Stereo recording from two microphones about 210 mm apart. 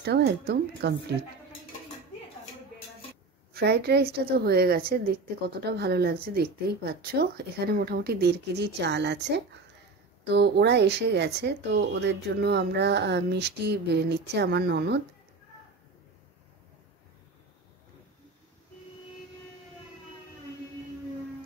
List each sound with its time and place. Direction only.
0.0 s speech: 50° right (ahead or behind)
3.5 s speech: 50° right (ahead or behind)